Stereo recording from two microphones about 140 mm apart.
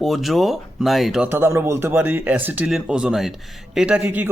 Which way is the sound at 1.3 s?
15° right (ahead or behind).